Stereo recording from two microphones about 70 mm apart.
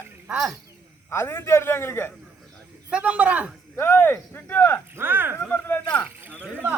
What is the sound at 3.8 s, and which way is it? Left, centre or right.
Speech, left.